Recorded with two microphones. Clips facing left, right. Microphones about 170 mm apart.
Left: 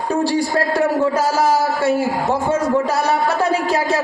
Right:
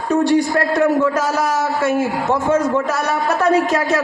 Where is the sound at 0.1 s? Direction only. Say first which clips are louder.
Right 4 dB; 30° left (ahead or behind).